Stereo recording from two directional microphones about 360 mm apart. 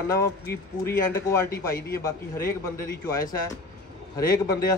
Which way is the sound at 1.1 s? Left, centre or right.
Centre.